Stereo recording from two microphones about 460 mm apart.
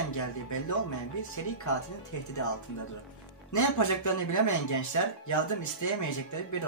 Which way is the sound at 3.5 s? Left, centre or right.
Left.